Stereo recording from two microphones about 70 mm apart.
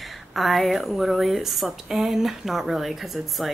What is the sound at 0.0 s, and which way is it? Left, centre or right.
Speech, centre.